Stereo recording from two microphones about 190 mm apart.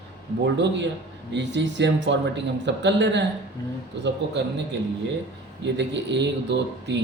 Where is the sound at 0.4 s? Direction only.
70° right (ahead or behind).